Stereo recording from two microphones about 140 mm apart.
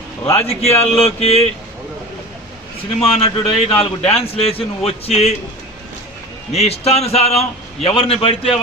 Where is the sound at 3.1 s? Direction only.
45° left (ahead or behind).